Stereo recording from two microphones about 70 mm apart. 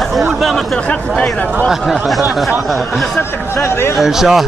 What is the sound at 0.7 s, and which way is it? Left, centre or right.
Speech, centre.